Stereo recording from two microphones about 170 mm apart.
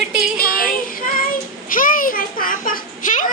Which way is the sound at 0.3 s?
60° left (ahead or behind).